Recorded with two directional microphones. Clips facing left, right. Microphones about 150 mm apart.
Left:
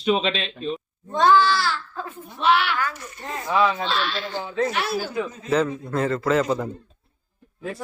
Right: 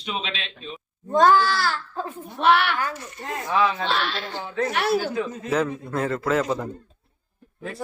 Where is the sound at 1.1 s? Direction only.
45° right (ahead or behind).